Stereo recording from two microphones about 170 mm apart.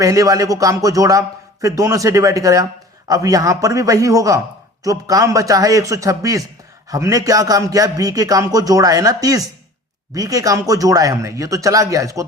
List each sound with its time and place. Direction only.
0.0 s speech: 20° right (ahead or behind)